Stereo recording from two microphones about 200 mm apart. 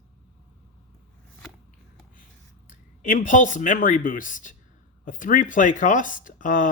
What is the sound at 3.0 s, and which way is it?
Speech, 40° left (ahead or behind).